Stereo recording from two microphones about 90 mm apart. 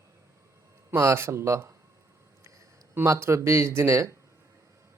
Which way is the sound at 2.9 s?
30° right (ahead or behind).